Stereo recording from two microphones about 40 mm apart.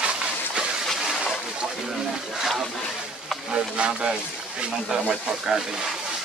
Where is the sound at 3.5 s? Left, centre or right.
Right.